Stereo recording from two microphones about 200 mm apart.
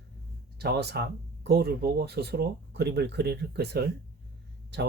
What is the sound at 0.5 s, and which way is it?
Speech, 55° right (ahead or behind).